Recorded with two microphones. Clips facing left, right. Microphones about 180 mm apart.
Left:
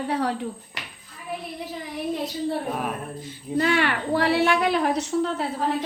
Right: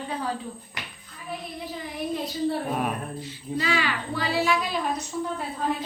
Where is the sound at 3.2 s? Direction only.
50° left (ahead or behind); by 5.5 s 80° left.